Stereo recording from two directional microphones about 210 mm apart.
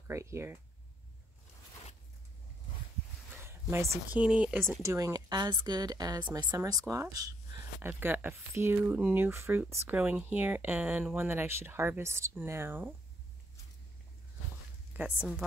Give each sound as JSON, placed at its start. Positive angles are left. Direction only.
{"t": 0.1, "sound": "speech", "side_deg": -15}
{"t": 3.4, "sound": "speech", "side_deg": -10}
{"t": 15.0, "sound": "a woman's voice", "side_deg": -10}